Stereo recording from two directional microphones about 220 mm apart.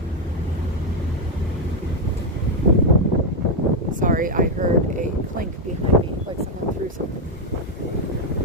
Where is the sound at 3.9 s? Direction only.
40° right (ahead or behind).